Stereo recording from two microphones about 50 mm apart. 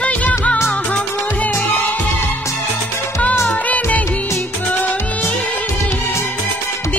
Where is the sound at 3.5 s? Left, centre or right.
Left.